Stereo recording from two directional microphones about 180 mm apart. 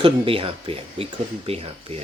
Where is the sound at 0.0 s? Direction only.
30° right (ahead or behind).